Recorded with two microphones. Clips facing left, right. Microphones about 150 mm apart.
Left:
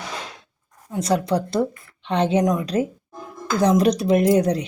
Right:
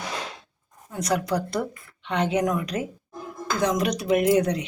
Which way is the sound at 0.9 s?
25° left (ahead or behind).